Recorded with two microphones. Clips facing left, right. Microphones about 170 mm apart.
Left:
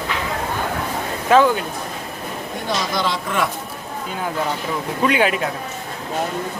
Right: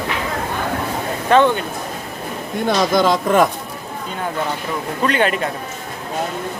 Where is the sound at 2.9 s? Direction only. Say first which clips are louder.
Right 10 dB; 45° right (ahead or behind).